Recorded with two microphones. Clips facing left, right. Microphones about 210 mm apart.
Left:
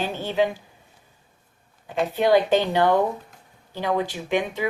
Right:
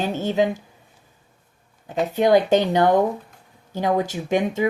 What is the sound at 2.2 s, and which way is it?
A woman's voice, 45° right (ahead or behind).